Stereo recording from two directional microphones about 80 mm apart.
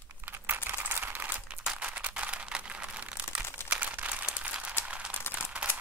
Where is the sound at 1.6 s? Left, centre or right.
Centre.